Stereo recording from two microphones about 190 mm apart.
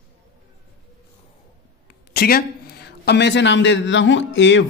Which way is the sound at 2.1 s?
55° left (ahead or behind).